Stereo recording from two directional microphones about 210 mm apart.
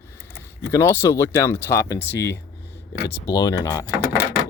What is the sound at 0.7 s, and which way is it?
Speech, 15° left (ahead or behind).